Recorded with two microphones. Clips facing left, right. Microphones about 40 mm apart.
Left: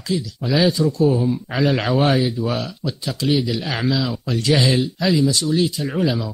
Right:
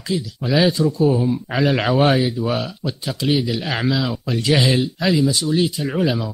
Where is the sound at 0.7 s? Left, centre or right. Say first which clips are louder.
Even; centre.